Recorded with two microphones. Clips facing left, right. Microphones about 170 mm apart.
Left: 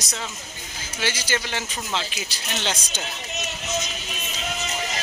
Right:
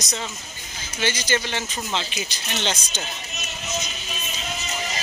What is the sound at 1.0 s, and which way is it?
Speech, 5° left (ahead or behind).